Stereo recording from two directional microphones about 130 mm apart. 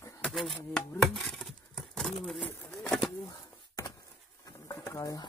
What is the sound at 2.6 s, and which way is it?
Bird, 10° left (ahead or behind).